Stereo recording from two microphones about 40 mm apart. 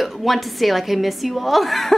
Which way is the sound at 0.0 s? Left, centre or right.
Centre.